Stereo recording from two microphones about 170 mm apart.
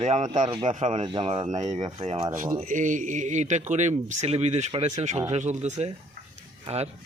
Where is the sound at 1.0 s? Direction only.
30° right (ahead or behind).